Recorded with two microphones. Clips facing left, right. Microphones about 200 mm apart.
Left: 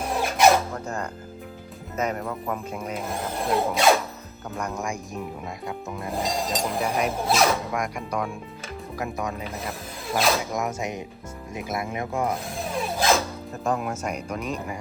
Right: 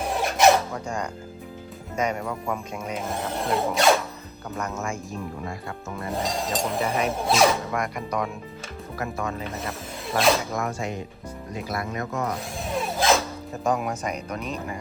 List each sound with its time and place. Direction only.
0.2 s a sound: centre (ahead or behind)
2.0 s speech: 5° left (ahead or behind)
5.6 s speech: centre (ahead or behind); by 9.3 s 15° left (ahead or behind)
9.4 s speech: centre (ahead or behind)
10.5 s speech: 20° left (ahead or behind)
12.5 s dog: centre (ahead or behind)
13.7 s speech: 5° left (ahead or behind)